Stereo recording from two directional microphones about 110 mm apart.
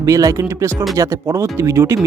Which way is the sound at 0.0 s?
30° right (ahead or behind).